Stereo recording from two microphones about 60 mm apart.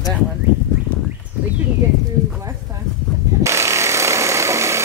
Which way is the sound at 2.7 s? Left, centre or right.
Right.